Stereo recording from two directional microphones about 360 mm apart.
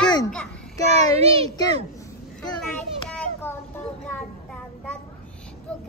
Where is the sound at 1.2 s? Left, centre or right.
Centre.